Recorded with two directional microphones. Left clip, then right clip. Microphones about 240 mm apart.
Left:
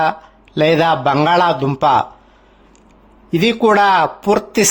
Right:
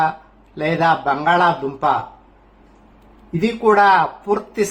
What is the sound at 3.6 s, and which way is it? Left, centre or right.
A man's voice, left.